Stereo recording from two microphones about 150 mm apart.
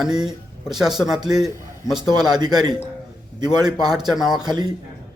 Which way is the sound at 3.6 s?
25° right (ahead or behind).